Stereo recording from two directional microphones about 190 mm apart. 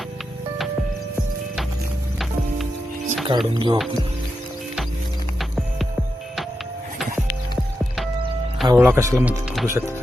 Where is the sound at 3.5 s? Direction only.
25° right (ahead or behind).